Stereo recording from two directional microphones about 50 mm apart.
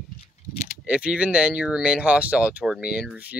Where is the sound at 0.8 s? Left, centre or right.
Centre.